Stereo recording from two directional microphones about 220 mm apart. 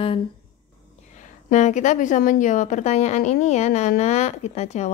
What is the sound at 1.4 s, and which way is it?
A woman's voice, 35° left (ahead or behind).